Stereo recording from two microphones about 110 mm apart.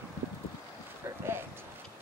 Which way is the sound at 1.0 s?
25° right (ahead or behind).